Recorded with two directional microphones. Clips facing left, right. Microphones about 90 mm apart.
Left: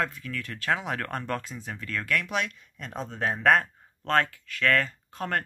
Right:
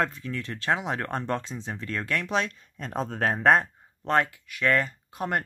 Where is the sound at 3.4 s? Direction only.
25° right (ahead or behind).